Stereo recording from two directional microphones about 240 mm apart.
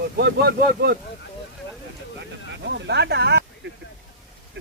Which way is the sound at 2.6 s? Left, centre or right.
Right.